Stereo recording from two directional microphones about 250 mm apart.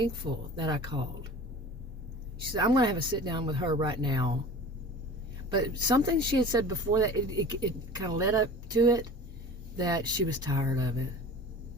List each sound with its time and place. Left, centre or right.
0.0 s speech: centre
2.5 s speech: centre
5.5 s speech: centre